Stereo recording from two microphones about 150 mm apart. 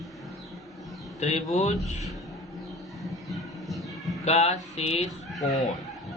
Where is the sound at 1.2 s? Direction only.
50° left (ahead or behind).